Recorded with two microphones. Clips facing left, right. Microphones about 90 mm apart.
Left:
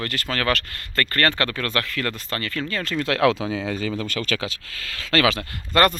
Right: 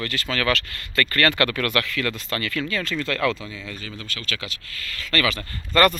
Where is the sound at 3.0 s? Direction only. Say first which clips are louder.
Left 7 dB; 65° left (ahead or behind); by 3.7 s 85° left.